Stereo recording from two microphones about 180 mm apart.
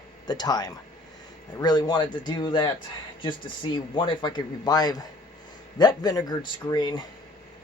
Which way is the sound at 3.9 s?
25° left (ahead or behind).